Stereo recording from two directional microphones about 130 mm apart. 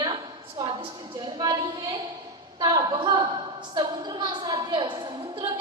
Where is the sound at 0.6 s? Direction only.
40° right (ahead or behind).